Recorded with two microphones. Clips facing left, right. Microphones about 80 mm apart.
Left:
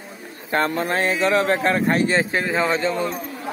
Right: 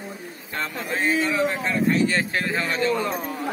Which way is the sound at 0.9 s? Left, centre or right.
Left.